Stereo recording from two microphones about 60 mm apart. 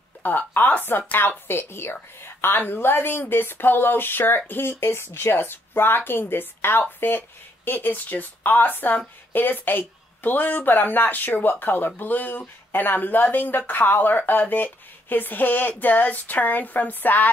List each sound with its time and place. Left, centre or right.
0.2 s a woman's voice: left